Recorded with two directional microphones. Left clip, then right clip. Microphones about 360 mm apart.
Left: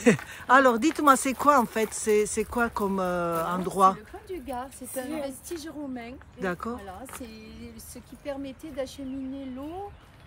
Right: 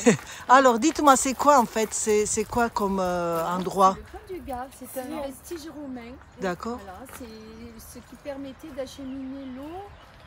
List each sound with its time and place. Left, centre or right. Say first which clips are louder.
0.0 s speech: right 1 dB; centre
8.3 s speech: left 1 dB; centre